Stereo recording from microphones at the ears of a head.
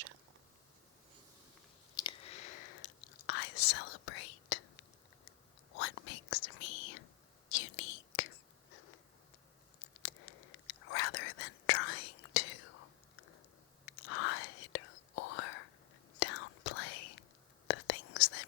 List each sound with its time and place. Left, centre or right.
2.0 s whispering: left